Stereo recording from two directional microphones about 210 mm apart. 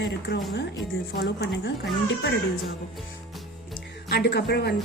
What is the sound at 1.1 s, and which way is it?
Speech, 50° left (ahead or behind).